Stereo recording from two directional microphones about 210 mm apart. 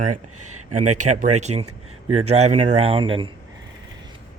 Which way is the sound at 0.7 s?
35° right (ahead or behind).